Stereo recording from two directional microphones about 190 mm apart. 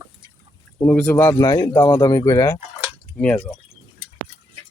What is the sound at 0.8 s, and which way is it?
Speech, 10° left (ahead or behind).